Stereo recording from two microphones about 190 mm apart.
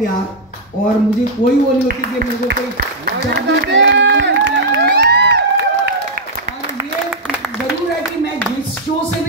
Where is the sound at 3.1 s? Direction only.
65° right (ahead or behind).